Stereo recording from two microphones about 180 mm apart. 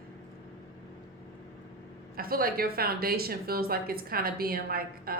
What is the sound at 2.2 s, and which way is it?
A woman's voice, 55° right (ahead or behind).